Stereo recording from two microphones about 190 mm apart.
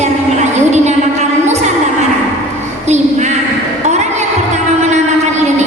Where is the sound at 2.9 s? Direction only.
35° right (ahead or behind).